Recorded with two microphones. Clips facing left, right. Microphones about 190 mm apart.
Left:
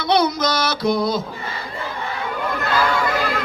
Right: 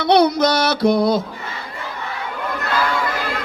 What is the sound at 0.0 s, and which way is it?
Music, 65° right (ahead or behind).